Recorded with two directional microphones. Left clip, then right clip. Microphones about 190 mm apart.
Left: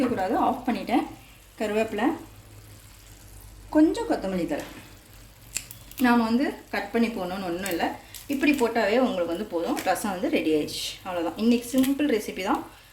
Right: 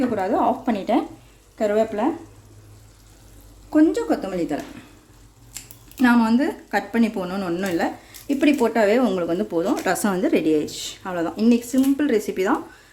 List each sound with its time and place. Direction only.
0.2 s a woman's voice: 25° right (ahead or behind)
3.7 s speech: 55° right (ahead or behind)
6.0 s speech: 50° right (ahead or behind)